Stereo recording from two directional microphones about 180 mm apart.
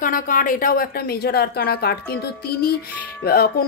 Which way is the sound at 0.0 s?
50° left (ahead or behind).